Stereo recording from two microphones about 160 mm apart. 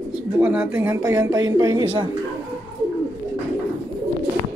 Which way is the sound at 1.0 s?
25° right (ahead or behind).